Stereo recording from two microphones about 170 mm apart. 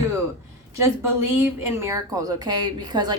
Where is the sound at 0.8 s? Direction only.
15° right (ahead or behind).